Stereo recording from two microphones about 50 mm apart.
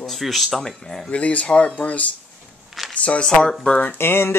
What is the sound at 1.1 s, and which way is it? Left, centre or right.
Speech, left.